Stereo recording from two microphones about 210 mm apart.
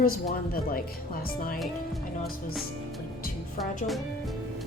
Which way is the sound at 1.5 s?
Centre (ahead or behind).